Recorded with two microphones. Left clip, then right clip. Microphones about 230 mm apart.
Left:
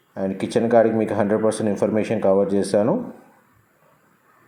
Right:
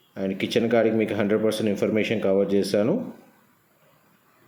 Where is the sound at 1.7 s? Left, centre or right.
Centre.